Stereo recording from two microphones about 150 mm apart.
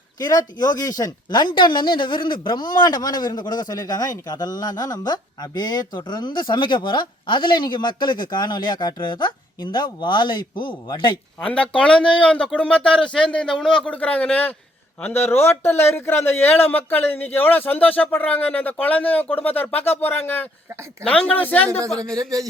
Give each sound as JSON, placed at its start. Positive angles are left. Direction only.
{"t": 0.2, "sound": "a man's voice", "side_deg": 25}
{"t": 11.3, "sound": "a man's voice", "side_deg": 10}
{"t": 22.1, "sound": "a man's voice", "side_deg": -25}